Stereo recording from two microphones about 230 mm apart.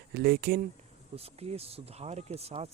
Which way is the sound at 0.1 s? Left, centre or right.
Right.